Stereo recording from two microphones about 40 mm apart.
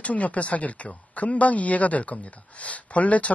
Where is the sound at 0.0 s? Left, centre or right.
Left.